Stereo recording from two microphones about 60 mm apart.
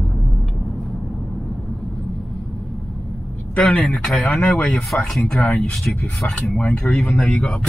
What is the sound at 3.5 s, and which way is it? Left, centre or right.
Speech, centre.